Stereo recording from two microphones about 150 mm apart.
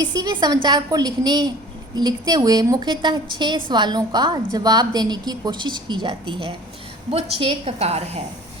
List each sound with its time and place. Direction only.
0.0 s a woman's voice: 25° right (ahead or behind); by 8.2 s 45° right (ahead or behind)